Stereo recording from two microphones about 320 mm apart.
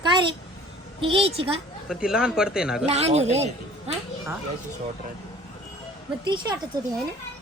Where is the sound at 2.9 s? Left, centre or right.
Centre.